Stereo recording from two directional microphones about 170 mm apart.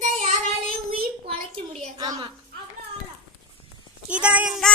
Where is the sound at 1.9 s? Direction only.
25° right (ahead or behind).